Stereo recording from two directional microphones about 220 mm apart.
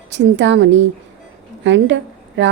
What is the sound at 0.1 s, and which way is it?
A woman's voice, 55° right (ahead or behind).